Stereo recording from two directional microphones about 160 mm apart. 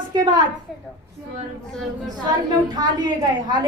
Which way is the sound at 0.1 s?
25° right (ahead or behind).